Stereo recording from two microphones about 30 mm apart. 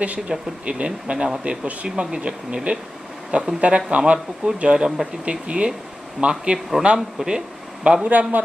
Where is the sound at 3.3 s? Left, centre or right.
Right.